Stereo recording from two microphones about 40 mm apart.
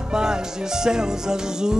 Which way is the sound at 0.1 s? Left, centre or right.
Centre.